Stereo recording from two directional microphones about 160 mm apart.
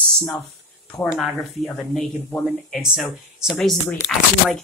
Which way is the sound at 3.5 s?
10° left (ahead or behind).